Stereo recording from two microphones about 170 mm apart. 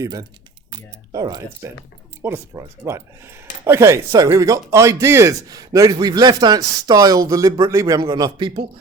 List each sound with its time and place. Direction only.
0.0 s speech: 20° right (ahead or behind)